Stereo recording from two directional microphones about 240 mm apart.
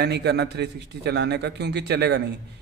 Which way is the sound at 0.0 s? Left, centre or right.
Right.